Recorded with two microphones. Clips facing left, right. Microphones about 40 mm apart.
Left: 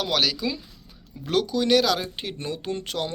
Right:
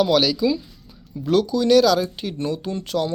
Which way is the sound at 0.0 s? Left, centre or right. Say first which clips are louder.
Right 6 dB; left.